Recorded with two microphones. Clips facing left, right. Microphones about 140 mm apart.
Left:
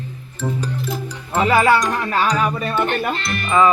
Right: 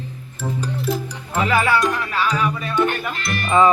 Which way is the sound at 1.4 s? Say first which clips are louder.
Left 3 dB; 35° left (ahead or behind).